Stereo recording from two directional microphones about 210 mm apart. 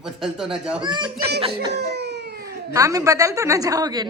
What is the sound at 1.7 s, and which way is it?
Crying, 55° right (ahead or behind).